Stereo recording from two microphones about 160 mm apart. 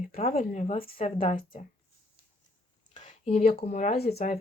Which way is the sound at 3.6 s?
45° left (ahead or behind).